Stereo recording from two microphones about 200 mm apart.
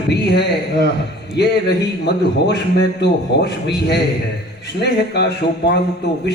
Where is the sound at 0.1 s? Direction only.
55° left (ahead or behind).